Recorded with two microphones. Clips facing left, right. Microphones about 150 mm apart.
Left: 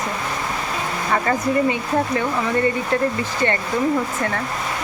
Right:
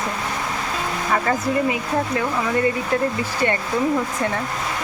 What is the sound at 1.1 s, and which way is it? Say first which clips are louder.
Speech: left 1 dB; centre (ahead or behind).